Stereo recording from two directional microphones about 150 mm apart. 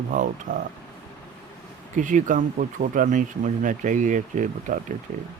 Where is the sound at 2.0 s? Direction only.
60° right (ahead or behind).